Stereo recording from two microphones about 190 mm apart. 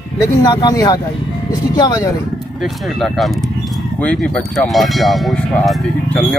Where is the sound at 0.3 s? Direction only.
20° left (ahead or behind).